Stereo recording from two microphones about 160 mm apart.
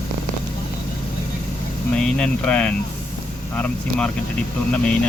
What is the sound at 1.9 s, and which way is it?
Speech, 5° left (ahead or behind).